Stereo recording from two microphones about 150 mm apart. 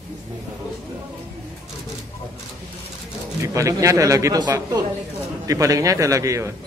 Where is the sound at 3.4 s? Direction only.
20° right (ahead or behind).